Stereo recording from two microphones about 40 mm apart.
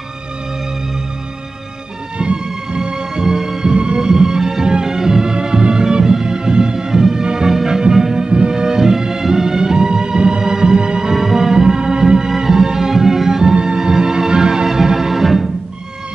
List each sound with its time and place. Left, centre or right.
2.1 s music: right